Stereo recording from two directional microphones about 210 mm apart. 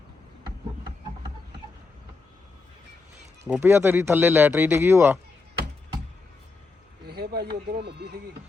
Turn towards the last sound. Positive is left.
turn(degrees=-50)  # may be behind; listen again after turning